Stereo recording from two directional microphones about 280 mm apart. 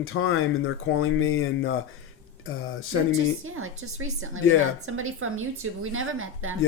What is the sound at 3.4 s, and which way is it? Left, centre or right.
A woman's voice, right.